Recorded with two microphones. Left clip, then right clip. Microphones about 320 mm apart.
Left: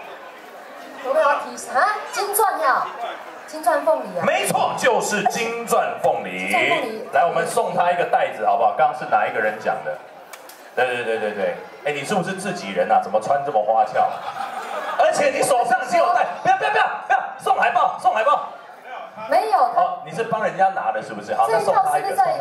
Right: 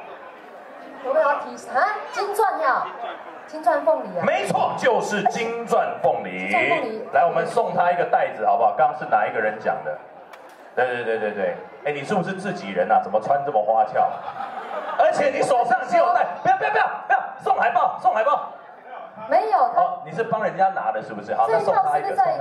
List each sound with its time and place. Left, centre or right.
1.0 s a sound: centre
1.8 s a man's voice: centre
4.2 s a man's voice: centre
10.8 s a man's voice: centre